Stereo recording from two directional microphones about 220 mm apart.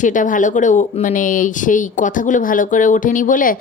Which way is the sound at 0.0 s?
35° left (ahead or behind).